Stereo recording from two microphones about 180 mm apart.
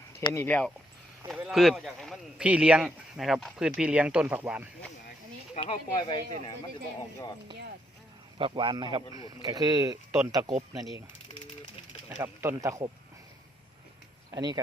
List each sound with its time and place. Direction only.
0.3 s speech: 10° left (ahead or behind); by 4.7 s 5° right (ahead or behind)
5.5 s speech: 30° left (ahead or behind)
8.4 s speech: 30° right (ahead or behind)
12.2 s speech: 15° right (ahead or behind)
14.3 s speech: 20° right (ahead or behind)